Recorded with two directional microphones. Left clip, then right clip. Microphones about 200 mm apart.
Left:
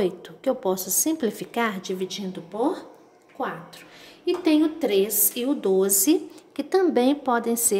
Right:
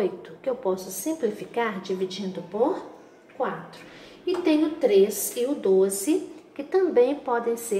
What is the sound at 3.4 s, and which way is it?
A woman's voice, 45° left (ahead or behind).